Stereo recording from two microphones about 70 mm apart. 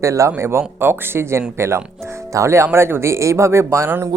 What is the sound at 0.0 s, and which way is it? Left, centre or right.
Speech, right.